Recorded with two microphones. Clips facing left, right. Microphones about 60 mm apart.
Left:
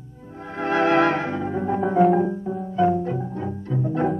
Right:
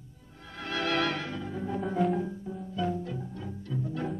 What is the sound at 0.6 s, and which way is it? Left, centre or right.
Music, left.